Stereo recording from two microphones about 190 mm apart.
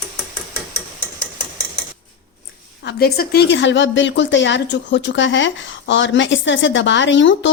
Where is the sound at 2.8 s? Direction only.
60° left (ahead or behind); by 7.5 s 75° left (ahead or behind).